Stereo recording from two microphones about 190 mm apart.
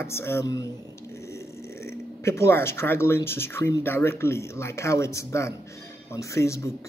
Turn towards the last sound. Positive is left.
turn(degrees=15)  # may be behind; listen again after turning